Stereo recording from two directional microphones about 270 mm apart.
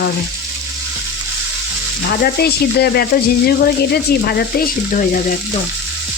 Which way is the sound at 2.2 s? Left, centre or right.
Left.